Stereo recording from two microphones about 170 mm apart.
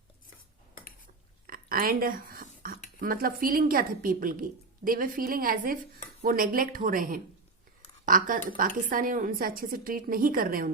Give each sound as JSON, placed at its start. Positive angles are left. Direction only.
{"t": 1.5, "sound": "a woman's voice", "side_deg": -55}